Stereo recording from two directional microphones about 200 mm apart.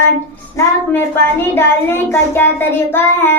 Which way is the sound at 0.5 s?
10° left (ahead or behind).